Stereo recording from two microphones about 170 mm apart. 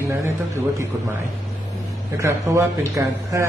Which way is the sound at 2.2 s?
15° right (ahead or behind).